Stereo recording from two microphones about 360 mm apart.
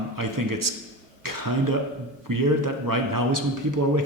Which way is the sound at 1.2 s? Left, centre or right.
Right.